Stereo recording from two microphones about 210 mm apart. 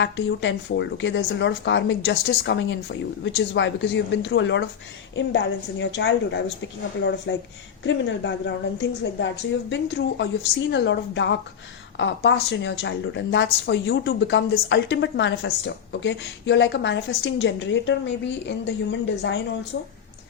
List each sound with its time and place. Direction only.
0.0 s a woman's voice: 60° left (ahead or behind)